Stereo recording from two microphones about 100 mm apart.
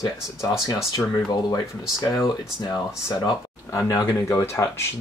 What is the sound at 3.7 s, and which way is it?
Speech, 30° left (ahead or behind).